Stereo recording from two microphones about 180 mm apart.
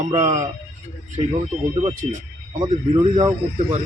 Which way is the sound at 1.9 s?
45° right (ahead or behind).